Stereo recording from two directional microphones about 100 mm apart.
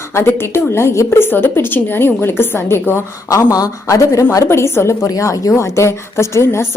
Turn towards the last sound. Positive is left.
turn(degrees=25)  # may be behind; listen again after turning